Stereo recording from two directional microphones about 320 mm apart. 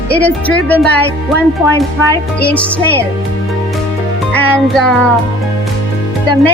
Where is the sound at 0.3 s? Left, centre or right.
Centre.